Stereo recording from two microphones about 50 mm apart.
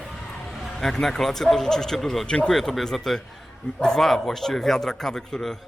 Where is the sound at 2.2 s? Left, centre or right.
Centre.